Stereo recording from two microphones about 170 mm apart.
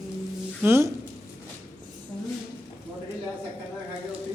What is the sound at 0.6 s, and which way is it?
Speech, 15° right (ahead or behind).